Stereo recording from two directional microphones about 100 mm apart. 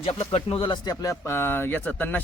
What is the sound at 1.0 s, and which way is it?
Speech, 30° left (ahead or behind).